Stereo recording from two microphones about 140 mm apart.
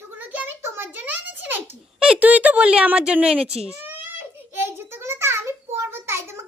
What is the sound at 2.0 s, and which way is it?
A child's voice, 10° right (ahead or behind).